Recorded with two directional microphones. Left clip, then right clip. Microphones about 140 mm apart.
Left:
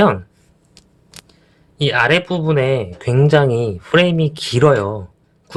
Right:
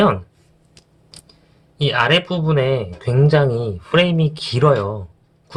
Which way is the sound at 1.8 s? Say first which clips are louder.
Left 2 dB; 35° left (ahead or behind).